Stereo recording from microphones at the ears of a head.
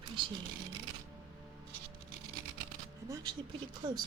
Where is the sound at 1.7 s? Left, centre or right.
Right.